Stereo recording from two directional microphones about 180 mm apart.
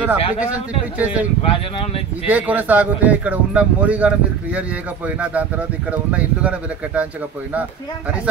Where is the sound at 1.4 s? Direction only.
30° left (ahead or behind).